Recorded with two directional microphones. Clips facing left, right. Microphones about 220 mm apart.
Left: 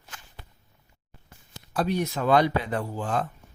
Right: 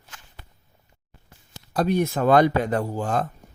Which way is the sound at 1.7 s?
50° right (ahead or behind).